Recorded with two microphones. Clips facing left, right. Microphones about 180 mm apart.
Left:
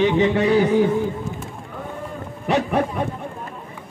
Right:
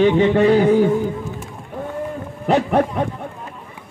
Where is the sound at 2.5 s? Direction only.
50° right (ahead or behind).